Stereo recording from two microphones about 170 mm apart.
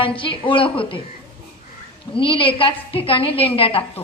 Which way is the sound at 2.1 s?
30° left (ahead or behind).